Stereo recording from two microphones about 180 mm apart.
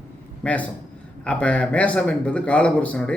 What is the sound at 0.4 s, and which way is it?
Speech, 5° left (ahead or behind).